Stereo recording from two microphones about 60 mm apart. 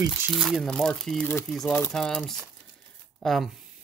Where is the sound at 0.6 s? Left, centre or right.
Centre.